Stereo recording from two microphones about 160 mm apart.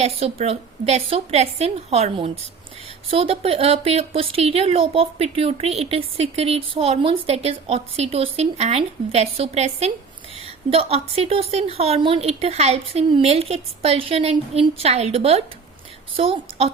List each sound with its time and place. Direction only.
0.0 s a woman's voice: 40° right (ahead or behind)